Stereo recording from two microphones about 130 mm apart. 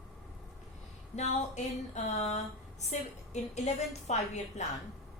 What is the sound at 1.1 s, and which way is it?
A woman's voice, 60° left (ahead or behind).